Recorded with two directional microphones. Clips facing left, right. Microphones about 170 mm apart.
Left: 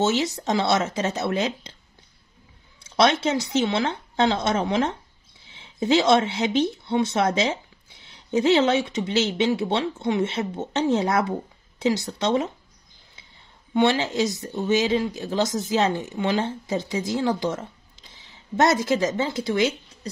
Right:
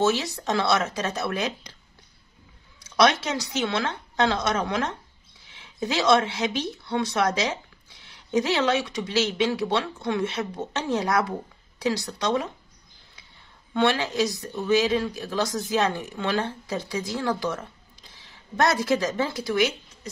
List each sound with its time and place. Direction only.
0.0 s speech: 20° left (ahead or behind)
2.8 s speech: 25° left (ahead or behind)
13.7 s speech: 20° left (ahead or behind)